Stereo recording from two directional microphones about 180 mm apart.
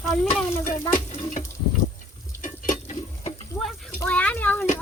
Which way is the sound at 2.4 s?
45° left (ahead or behind).